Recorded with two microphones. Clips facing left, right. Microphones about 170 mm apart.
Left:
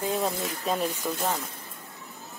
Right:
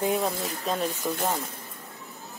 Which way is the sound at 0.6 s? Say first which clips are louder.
Left 1 dB; centre (ahead or behind).